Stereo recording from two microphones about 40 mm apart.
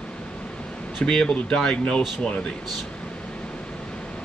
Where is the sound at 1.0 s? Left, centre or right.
Centre.